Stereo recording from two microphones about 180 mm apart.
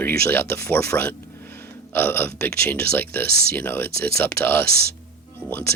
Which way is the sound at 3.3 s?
60° right (ahead or behind).